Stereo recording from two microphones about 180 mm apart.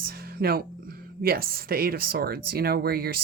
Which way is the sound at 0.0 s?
55° right (ahead or behind).